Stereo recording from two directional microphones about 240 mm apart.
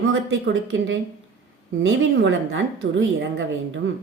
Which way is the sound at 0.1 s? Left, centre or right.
Right.